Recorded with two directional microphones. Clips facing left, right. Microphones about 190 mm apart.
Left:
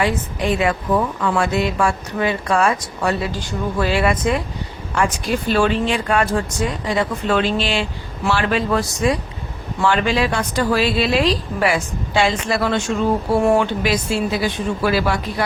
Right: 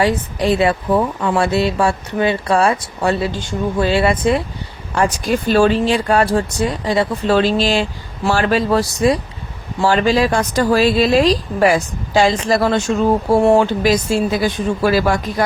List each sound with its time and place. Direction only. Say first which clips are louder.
0.0 s speech: right 4 dB; 35° right (ahead or behind)